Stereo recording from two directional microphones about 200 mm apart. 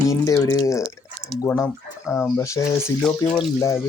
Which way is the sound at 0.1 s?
15° left (ahead or behind).